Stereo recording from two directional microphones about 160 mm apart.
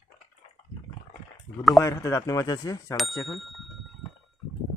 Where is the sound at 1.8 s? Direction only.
20° left (ahead or behind).